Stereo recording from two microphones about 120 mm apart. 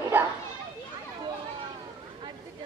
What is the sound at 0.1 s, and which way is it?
Children playing, 15° right (ahead or behind).